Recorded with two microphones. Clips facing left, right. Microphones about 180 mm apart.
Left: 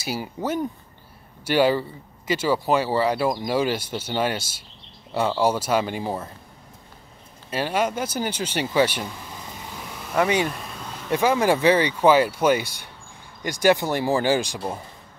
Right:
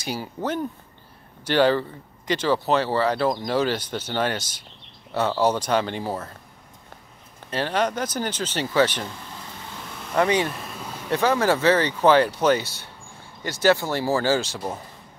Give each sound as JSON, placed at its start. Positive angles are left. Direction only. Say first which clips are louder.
{"t": 0.0, "sound": "speech", "louder": "left 1 dB", "side_deg": 10}
{"t": 7.5, "sound": "speech", "louder": "even", "side_deg": 10}
{"t": 9.7, "sound": "vehicle", "louder": "even", "side_deg": 10}
{"t": 10.5, "sound": "a sound", "louder": "right 1 dB", "side_deg": 0}
{"t": 11.1, "sound": "speech", "louder": "left 1 dB", "side_deg": 10}